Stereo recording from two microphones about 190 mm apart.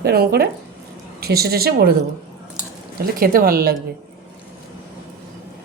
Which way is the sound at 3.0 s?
50° right (ahead or behind).